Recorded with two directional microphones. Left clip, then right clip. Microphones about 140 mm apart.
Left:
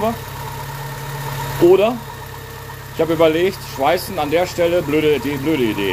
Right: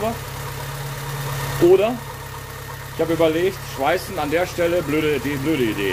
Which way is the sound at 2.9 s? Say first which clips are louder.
Left 4 dB; 45° left (ahead or behind).